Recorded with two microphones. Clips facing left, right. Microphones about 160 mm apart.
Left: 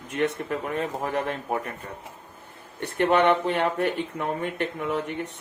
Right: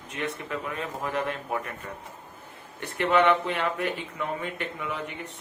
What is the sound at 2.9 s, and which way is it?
Speech, 40° left (ahead or behind).